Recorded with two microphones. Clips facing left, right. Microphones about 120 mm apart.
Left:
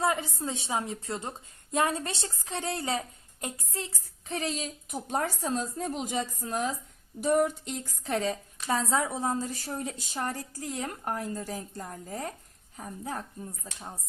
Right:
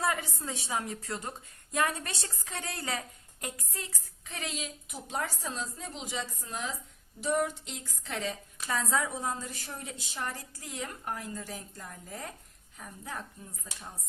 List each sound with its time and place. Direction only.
0.0 s a woman's voice: 25° left (ahead or behind); by 13.2 s 40° left (ahead or behind)